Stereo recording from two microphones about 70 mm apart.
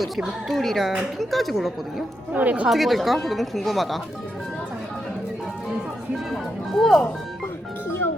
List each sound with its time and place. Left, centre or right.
0.0 s speech: centre
2.3 s a woman's voice: right
2.6 s speech: centre
6.3 s speech: centre